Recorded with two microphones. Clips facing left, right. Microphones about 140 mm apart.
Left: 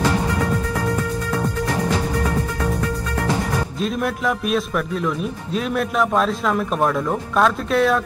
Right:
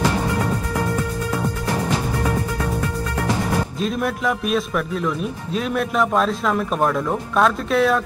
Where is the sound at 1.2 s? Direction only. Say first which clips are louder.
Left 1 dB; 5° right (ahead or behind).